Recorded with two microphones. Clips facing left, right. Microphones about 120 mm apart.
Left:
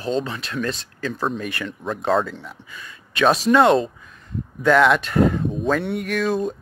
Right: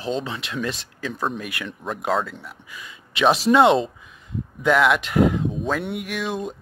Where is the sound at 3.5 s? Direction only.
20° right (ahead or behind).